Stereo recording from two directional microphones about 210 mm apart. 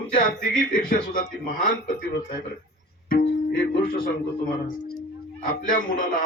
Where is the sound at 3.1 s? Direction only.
50° left (ahead or behind).